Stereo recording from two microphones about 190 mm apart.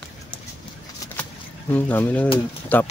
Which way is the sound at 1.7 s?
10° left (ahead or behind).